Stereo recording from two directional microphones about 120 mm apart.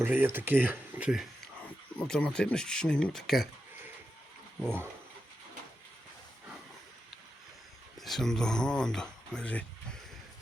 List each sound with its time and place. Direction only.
0.0 s speech: 15° right (ahead or behind)
2.0 s speech: 5° left (ahead or behind)
7.9 s speech: centre (ahead or behind)